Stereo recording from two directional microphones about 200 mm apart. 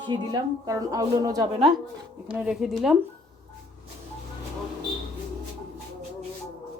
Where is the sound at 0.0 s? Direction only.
20° right (ahead or behind).